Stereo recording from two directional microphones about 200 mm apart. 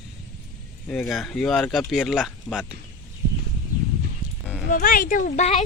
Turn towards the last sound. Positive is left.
turn(degrees=35)  # may be behind; listen again after turning